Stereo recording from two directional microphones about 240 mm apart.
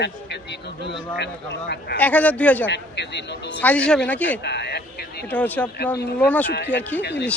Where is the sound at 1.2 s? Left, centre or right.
Left.